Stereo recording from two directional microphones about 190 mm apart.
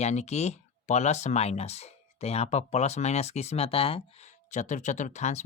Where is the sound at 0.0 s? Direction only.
35° left (ahead or behind).